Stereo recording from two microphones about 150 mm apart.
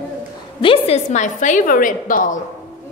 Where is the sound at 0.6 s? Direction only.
40° left (ahead or behind); by 2.4 s 60° left (ahead or behind).